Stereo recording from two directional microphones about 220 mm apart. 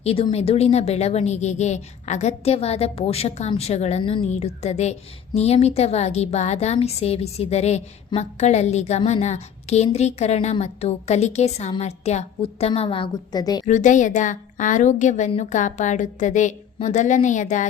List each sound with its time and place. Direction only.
0.0 s a woman's voice: 25° left (ahead or behind)
13.7 s a woman's voice: 35° left (ahead or behind)